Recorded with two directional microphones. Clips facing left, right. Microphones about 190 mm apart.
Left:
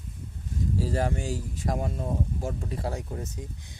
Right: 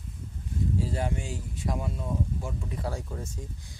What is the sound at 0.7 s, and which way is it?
Speech, 40° left (ahead or behind).